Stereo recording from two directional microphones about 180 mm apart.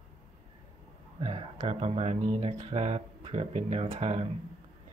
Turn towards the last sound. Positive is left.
turn(degrees=-35)  # may be behind; listen again after turning